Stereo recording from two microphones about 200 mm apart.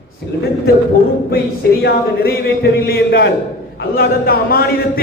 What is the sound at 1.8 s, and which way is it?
A man's voice, 55° left (ahead or behind).